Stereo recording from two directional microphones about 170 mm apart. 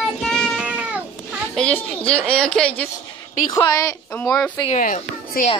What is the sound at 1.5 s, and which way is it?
A woman's voice, 5° left (ahead or behind).